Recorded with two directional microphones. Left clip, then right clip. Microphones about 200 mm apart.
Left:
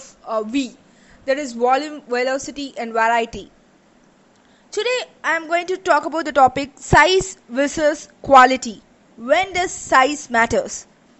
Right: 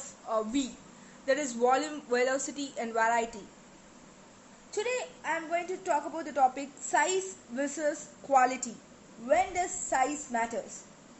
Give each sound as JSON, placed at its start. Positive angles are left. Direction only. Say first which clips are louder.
{"t": 0.3, "sound": "a woman's voice", "louder": "left 9 dB", "side_deg": 35}
{"t": 4.6, "sound": "speech", "louder": "left 11 dB", "side_deg": 30}
{"t": 5.2, "sound": "a woman's voice", "louder": "left 13 dB", "side_deg": 50}